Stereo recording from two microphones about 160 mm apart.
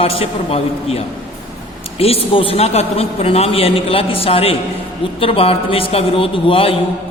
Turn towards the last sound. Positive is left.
turn(degrees=35)  # may be behind; listen again after turning